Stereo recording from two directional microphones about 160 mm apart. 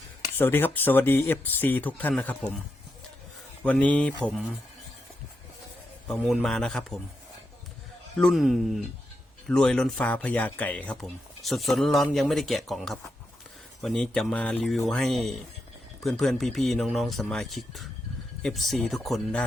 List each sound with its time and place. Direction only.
0.3 s speech: 15° left (ahead or behind)
3.6 s speech: 10° left (ahead or behind)
6.1 s speech: centre (ahead or behind)
8.2 s speech: centre (ahead or behind)